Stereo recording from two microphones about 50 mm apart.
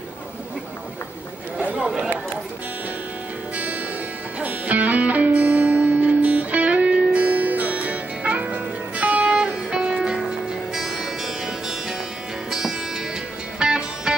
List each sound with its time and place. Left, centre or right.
1.8 s a sound: centre
3.5 s music: right
9.3 s music: centre
13.6 s music: centre